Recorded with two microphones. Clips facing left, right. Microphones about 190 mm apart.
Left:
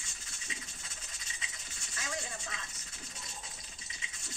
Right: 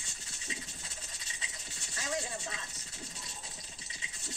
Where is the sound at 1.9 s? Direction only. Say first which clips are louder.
Right 4 dB; 35° right (ahead or behind).